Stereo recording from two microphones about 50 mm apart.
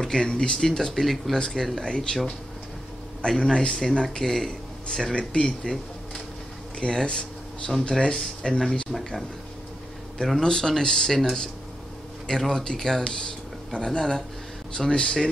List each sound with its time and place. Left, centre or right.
0.0 s speech: centre
6.8 s speech: centre
10.4 s speech: centre
12.3 s speech: centre